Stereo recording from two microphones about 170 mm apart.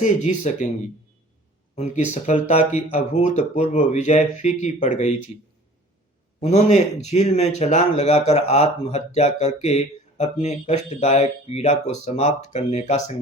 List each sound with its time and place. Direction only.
0.0 s speech: 45° left (ahead or behind)
1.7 s speech: 40° left (ahead or behind)
6.4 s speech: 40° left (ahead or behind)